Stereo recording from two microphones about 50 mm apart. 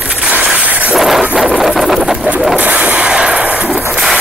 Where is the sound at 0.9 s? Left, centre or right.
Centre.